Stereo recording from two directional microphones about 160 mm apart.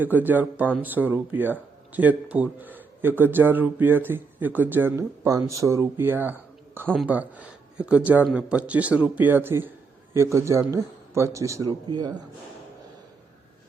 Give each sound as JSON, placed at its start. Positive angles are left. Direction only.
{"t": 0.0, "sound": "speech", "side_deg": -10}
{"t": 6.8, "sound": "speech", "side_deg": 0}
{"t": 7.1, "sound": "a man's voice", "side_deg": -10}